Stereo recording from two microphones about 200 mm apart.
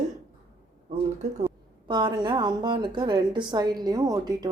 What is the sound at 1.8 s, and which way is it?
A woman's voice, 20° right (ahead or behind).